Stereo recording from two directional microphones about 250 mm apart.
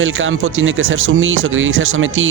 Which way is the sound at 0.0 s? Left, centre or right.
Right.